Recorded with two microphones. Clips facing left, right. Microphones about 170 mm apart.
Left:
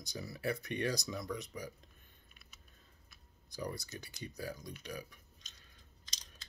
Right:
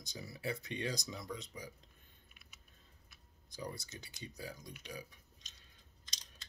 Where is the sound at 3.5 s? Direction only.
20° right (ahead or behind).